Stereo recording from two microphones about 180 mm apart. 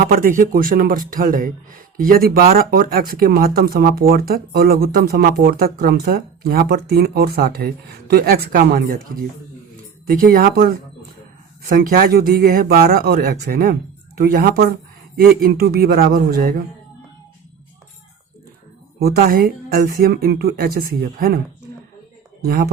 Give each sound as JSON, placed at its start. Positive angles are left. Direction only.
{"t": 0.0, "sound": "speech", "side_deg": -50}
{"t": 18.9, "sound": "speech", "side_deg": -60}